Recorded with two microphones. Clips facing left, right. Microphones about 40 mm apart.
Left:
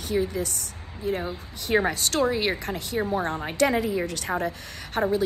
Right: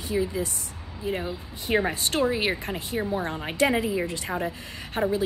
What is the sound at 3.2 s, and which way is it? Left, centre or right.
Speech, centre.